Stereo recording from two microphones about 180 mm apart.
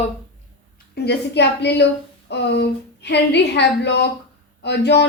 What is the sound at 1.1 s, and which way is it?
A woman's voice, 70° left (ahead or behind).